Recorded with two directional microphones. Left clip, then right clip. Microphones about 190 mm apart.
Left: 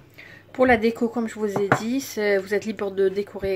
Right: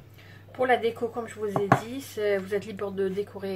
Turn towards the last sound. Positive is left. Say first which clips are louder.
# left 7 dB
turn(degrees=45)  # may be behind; listen again after turning